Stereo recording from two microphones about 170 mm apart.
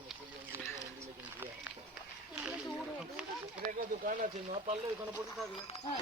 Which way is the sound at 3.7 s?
55° right (ahead or behind).